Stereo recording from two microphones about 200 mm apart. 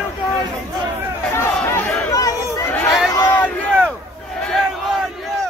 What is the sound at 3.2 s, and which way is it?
Crowd, 10° left (ahead or behind).